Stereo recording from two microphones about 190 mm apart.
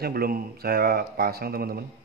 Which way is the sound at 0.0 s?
50° right (ahead or behind).